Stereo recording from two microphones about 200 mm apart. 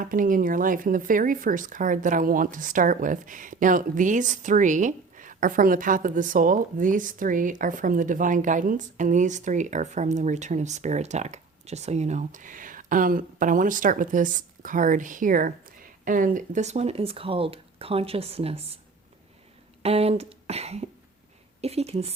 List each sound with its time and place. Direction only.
0.0 s speech: 45° right (ahead or behind)
19.8 s speech: 30° right (ahead or behind)